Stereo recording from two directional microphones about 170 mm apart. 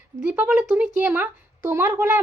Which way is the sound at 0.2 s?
10° right (ahead or behind).